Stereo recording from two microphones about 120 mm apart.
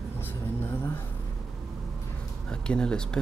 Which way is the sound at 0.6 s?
20° left (ahead or behind).